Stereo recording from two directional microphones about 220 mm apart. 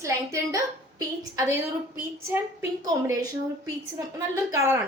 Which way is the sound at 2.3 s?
15° right (ahead or behind).